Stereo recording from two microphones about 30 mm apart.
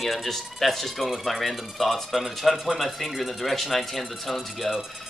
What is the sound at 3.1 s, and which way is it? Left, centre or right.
Speech, centre.